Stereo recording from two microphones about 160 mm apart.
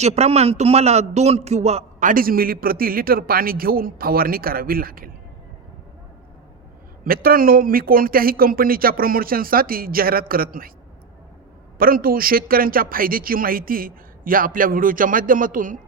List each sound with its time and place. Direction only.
0.0 s a man's voice: 40° right (ahead or behind); by 5.1 s 65° right (ahead or behind)
7.0 s a man's voice: 65° right (ahead or behind)
11.8 s a man's voice: 65° right (ahead or behind)